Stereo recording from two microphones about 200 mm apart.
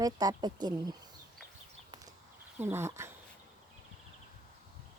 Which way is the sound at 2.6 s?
10° right (ahead or behind).